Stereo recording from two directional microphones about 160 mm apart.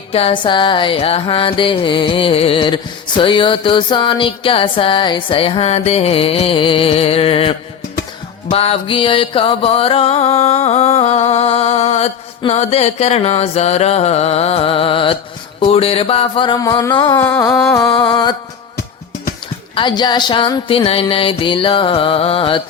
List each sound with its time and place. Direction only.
0.1 s music: 35° left (ahead or behind)
17.2 s music: 15° left (ahead or behind)
19.7 s music: 30° left (ahead or behind)